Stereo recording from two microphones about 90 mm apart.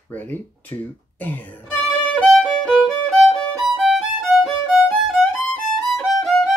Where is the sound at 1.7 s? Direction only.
5° left (ahead or behind).